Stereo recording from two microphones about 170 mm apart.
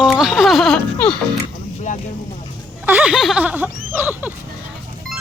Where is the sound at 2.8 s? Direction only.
10° right (ahead or behind).